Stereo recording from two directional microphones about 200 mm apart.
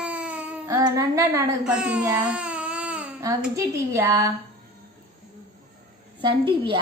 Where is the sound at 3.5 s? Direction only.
15° right (ahead or behind).